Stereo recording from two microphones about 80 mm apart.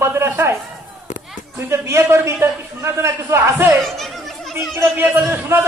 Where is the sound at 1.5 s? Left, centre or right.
Right.